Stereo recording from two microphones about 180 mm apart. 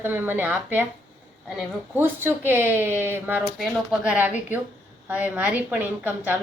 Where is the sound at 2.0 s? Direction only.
10° right (ahead or behind).